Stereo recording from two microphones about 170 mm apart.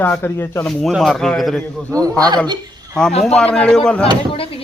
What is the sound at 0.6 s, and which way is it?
Speech, centre (ahead or behind).